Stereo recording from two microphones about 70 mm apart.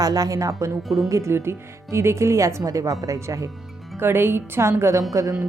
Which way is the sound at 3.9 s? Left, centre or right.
Right.